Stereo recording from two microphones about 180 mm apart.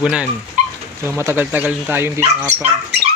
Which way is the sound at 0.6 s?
45° right (ahead or behind).